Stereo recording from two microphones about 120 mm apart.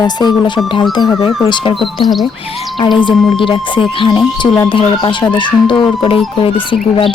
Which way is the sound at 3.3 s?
45° left (ahead or behind).